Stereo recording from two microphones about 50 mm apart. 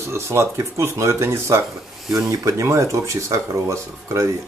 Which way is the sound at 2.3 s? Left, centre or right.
Right.